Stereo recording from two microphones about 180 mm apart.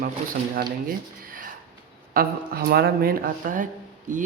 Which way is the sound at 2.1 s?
55° right (ahead or behind).